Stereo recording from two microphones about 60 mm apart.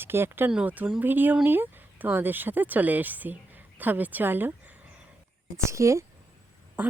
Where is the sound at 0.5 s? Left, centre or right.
Right.